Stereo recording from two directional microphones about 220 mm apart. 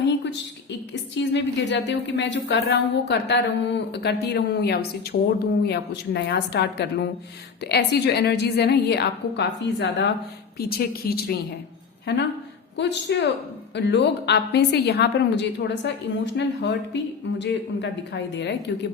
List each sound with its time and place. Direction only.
1.3 s a woman's voice: 55° left (ahead or behind)
12.7 s a woman's voice: 50° left (ahead or behind)